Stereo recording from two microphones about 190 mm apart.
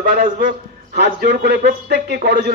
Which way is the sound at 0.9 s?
60° right (ahead or behind).